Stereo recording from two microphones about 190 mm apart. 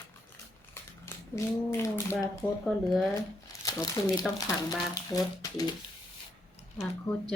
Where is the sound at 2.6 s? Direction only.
Centre (ahead or behind).